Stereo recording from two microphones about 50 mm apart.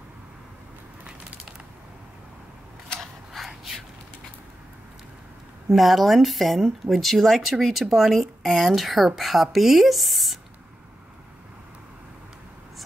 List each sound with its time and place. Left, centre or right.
3.3 s gasp: centre
5.7 s speech: centre